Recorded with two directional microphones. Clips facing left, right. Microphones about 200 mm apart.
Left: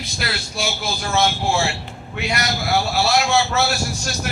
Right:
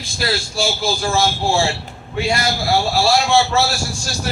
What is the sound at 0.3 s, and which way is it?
A man's voice, 30° right (ahead or behind).